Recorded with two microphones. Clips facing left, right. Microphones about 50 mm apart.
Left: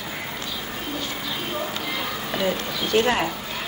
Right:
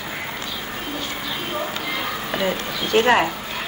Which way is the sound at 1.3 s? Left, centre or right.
Right.